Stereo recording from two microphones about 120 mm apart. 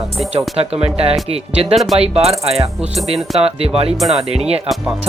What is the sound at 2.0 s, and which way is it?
Speech, 60° right (ahead or behind).